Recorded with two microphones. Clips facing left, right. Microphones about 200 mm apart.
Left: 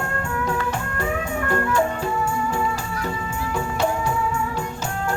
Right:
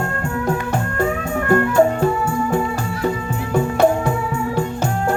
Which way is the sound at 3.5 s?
55° right (ahead or behind).